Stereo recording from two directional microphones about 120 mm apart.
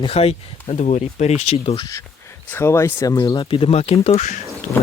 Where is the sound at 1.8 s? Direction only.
25° left (ahead or behind).